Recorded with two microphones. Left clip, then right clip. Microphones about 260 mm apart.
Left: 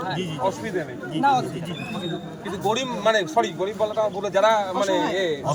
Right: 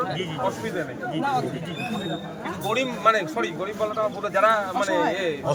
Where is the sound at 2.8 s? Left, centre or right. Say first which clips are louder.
Right 2 dB; centre.